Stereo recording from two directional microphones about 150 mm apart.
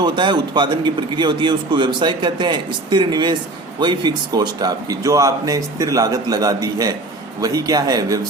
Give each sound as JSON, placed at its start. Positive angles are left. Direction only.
{"t": 0.0, "sound": "a man's voice", "side_deg": -30}